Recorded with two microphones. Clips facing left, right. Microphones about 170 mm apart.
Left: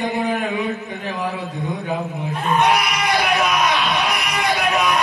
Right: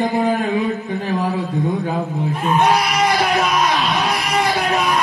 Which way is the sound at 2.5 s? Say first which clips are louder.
Right 2 dB; 30° right (ahead or behind).